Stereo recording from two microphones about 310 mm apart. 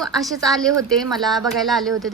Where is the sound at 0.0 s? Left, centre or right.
Centre.